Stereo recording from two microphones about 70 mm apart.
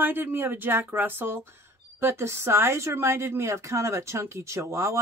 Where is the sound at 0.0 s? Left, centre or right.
Right.